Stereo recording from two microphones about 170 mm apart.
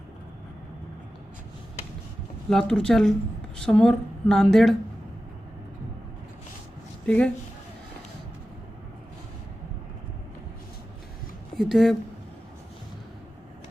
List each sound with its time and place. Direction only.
2.5 s a woman's voice: centre (ahead or behind)
7.0 s speech: 5° left (ahead or behind)
11.5 s speech: centre (ahead or behind)